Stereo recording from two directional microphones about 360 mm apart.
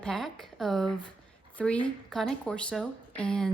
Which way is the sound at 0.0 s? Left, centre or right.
Centre.